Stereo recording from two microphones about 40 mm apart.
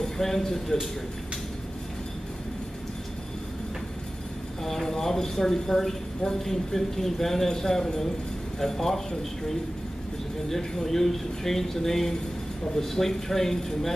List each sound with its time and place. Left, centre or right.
0.0 s speech: centre
4.6 s a man's voice: centre
10.5 s a man's voice: centre